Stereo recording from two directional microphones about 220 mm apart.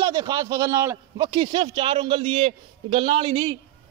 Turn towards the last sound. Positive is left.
turn(degrees=-20)  # may be behind; listen again after turning